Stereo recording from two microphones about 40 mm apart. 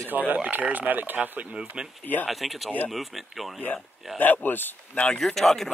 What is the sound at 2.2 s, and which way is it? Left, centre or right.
Speech, centre.